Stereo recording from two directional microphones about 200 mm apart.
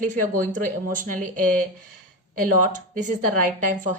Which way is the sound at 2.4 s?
40° right (ahead or behind).